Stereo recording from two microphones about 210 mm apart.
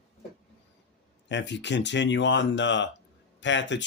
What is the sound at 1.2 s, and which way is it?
Speech, 55° left (ahead or behind).